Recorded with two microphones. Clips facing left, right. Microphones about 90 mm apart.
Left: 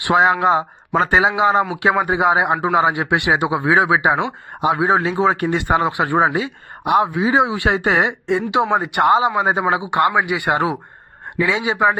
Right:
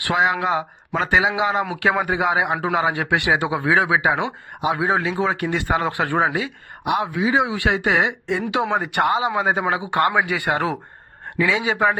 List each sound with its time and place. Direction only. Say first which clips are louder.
0.2 s speech: left 5 dB; 35° left (ahead or behind)
1.7 s speech: left 3 dB; 25° left (ahead or behind)
8.4 s speech: left 4 dB; 20° left (ahead or behind)
9.0 s speech: left 8 dB; 35° left (ahead or behind)
9.3 s speech: left 3 dB; 20° left (ahead or behind)